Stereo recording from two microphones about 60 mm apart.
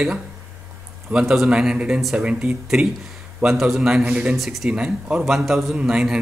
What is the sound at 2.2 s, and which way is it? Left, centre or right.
Speech, centre.